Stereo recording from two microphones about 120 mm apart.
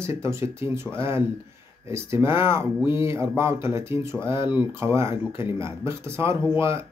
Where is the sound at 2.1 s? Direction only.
20° right (ahead or behind).